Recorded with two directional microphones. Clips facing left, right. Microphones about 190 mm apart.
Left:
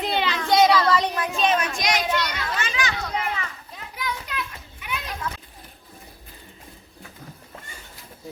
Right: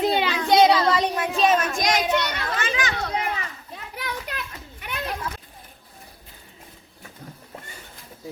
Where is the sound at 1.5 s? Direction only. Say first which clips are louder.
Right 2 dB; 45° right (ahead or behind).